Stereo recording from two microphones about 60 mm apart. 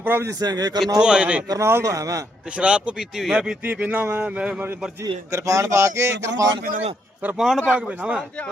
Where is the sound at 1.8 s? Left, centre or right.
Right.